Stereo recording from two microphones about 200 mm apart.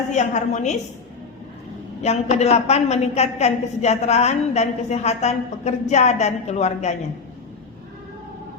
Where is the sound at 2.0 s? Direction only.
35° left (ahead or behind).